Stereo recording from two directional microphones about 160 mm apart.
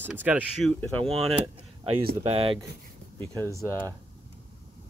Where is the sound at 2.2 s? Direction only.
35° right (ahead or behind).